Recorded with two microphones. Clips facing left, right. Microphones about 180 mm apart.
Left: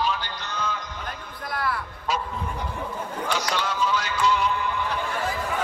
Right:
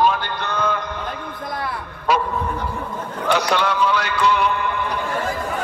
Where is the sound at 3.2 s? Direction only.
65° right (ahead or behind).